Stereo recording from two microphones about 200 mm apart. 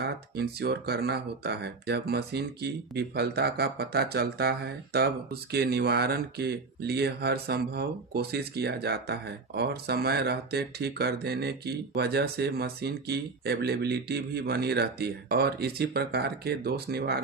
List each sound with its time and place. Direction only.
0.0 s speech: 55° right (ahead or behind)